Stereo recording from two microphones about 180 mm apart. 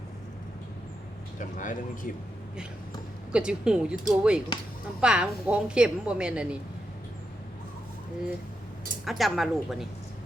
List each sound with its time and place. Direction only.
1.4 s speech: 45° left (ahead or behind)
3.3 s a woman's voice: 5° right (ahead or behind)
9.0 s a woman's voice: centre (ahead or behind)